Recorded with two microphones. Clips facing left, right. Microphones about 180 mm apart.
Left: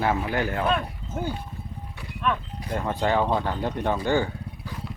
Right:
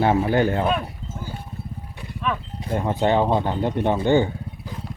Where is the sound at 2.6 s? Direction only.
20° right (ahead or behind).